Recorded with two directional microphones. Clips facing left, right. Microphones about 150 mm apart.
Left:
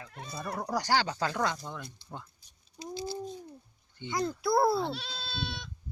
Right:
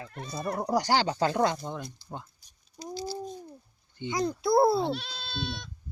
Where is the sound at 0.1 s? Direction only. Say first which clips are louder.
Right 4 dB; 5° left (ahead or behind).